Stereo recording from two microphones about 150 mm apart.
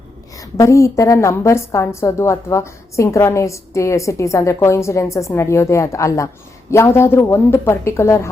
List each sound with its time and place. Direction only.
0.5 s a woman's voice: 20° left (ahead or behind)